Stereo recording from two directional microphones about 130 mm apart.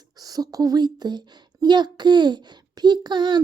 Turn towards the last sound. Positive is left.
turn(degrees=-35)  # may be behind; listen again after turning